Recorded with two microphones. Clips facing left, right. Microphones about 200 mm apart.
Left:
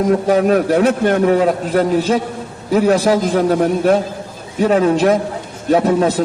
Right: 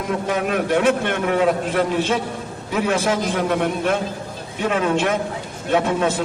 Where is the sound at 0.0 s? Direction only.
35° left (ahead or behind).